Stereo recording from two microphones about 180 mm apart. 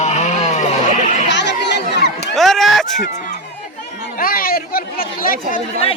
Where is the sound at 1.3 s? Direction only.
75° left (ahead or behind).